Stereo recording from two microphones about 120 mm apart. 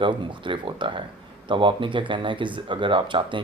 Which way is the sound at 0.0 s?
45° right (ahead or behind).